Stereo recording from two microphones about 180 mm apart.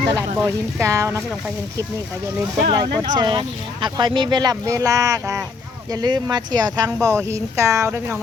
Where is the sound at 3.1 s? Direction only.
25° right (ahead or behind).